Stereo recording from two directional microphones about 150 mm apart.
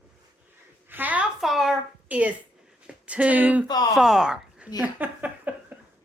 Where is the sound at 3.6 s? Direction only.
25° left (ahead or behind).